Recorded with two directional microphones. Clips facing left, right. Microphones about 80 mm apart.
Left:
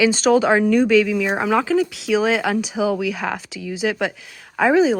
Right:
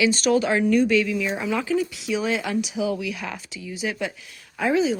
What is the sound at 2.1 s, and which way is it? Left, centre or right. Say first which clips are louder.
Speech: left 7 dB; left.